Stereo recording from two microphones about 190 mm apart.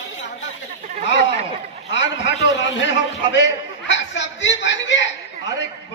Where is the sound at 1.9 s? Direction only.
70° left (ahead or behind).